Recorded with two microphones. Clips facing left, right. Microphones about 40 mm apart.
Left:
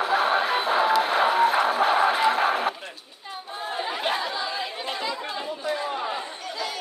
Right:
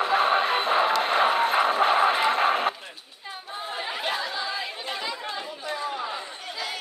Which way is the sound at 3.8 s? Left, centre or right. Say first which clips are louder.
Left 3 dB; centre.